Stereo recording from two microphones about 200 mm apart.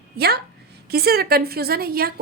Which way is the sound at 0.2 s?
50° right (ahead or behind).